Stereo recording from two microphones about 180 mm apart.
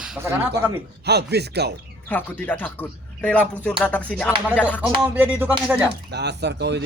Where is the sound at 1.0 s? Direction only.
65° right (ahead or behind).